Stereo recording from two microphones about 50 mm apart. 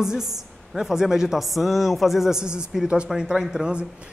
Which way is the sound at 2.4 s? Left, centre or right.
Centre.